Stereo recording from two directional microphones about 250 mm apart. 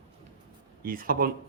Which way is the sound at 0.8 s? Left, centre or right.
Right.